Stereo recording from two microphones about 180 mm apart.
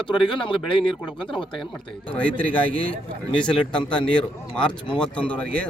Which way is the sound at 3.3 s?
5° left (ahead or behind).